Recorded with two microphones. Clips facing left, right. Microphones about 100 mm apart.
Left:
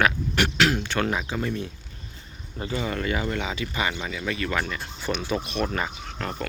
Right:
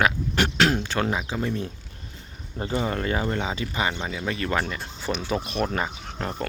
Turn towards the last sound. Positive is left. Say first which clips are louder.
# right 1 dB
turn(degrees=-20)  # may be behind; listen again after turning